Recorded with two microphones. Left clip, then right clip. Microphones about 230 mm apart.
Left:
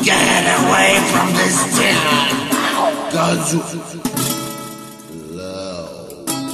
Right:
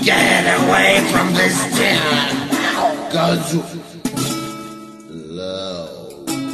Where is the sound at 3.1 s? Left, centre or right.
Left.